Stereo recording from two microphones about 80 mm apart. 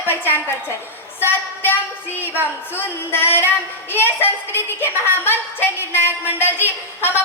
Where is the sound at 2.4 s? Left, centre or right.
Left.